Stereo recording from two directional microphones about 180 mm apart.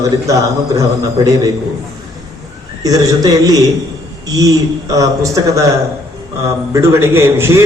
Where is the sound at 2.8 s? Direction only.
20° right (ahead or behind).